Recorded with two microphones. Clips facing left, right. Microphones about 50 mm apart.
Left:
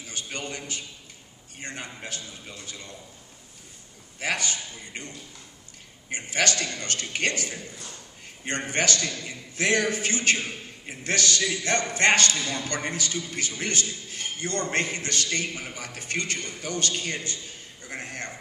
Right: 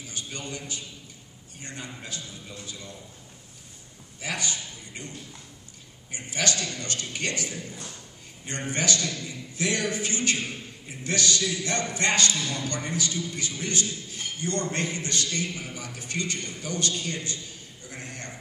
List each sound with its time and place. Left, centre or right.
0.0 s a man's voice: left
4.2 s a man's voice: left
12.4 s a man's voice: left
17.8 s a sound: left